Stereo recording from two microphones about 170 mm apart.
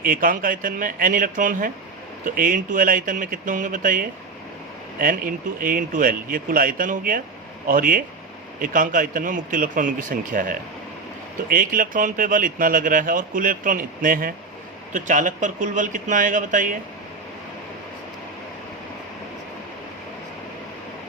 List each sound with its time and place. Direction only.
0.0 s speech: 55° right (ahead or behind)